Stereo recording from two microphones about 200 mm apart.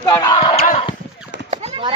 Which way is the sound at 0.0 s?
20° left (ahead or behind).